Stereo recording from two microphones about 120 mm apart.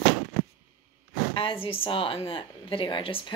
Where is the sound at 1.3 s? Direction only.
45° left (ahead or behind).